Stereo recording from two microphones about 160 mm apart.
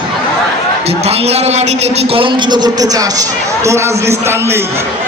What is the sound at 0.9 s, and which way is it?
A man's voice, 40° right (ahead or behind).